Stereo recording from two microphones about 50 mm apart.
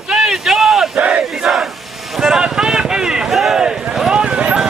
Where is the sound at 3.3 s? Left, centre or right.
Centre.